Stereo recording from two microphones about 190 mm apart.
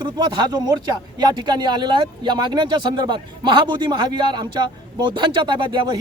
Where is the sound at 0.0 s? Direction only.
25° right (ahead or behind).